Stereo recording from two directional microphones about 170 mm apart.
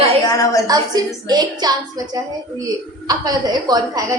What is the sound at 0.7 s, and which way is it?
A woman's voice, 25° right (ahead or behind).